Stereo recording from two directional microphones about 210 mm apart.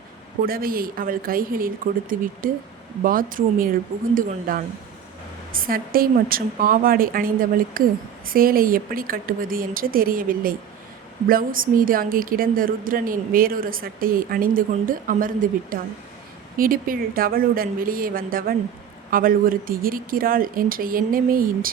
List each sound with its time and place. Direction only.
0.4 s a woman's voice: 45° right (ahead or behind)